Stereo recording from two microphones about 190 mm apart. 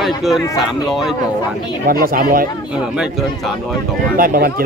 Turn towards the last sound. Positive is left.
turn(degrees=-50)  # may be behind; listen again after turning